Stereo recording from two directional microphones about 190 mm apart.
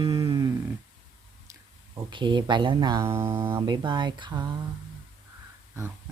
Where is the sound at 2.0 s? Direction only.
25° right (ahead or behind).